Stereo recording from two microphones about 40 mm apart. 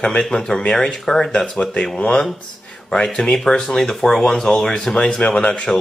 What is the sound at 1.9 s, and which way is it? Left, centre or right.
Speech, left.